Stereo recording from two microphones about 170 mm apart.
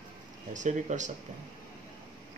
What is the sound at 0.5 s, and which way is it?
Speech, 45° right (ahead or behind).